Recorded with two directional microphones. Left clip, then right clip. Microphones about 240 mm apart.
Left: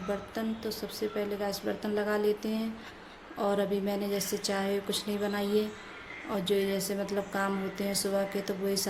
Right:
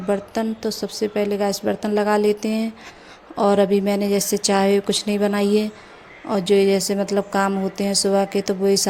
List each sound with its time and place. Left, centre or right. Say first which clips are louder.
0.1 s speech: right 12 dB; right